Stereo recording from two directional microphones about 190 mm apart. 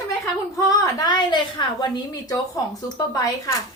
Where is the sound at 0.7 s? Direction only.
20° left (ahead or behind).